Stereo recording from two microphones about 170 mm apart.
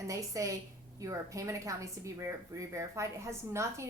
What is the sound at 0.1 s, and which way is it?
A woman's voice, 20° right (ahead or behind).